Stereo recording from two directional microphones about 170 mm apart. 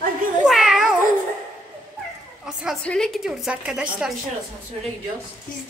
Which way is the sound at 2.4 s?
5° right (ahead or behind).